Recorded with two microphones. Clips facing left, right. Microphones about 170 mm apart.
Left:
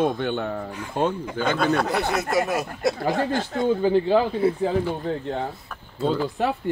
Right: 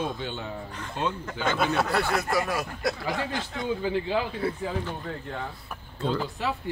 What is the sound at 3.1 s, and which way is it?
A man's voice, 50° left (ahead or behind).